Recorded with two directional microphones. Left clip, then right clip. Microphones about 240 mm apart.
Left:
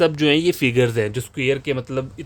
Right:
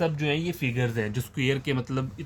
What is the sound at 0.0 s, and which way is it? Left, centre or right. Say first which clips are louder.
Speech: left 11 dB; left.